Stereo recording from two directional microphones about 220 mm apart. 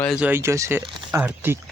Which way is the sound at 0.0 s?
Centre (ahead or behind).